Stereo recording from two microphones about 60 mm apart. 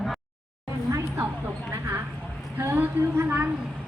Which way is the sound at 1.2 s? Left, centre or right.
Right.